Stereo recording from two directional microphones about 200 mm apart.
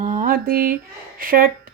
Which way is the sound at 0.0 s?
40° right (ahead or behind).